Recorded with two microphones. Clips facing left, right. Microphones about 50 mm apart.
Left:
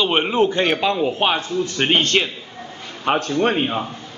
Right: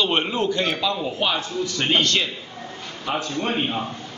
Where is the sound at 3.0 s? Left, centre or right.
Left.